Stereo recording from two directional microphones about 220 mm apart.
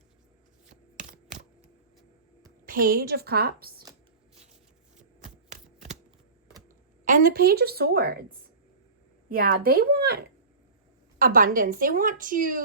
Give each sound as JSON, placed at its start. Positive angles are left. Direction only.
{"t": 0.9, "sound": "typing", "side_deg": -35}
{"t": 2.6, "sound": "a woman's voice", "side_deg": -40}
{"t": 5.5, "sound": "a sound", "side_deg": -30}
{"t": 7.0, "sound": "a woman's voice", "side_deg": -40}
{"t": 9.3, "sound": "a woman's voice", "side_deg": -40}
{"t": 11.3, "sound": "a woman's voice", "side_deg": -40}